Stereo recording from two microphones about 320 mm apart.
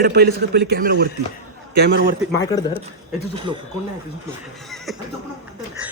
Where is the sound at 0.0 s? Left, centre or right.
Right.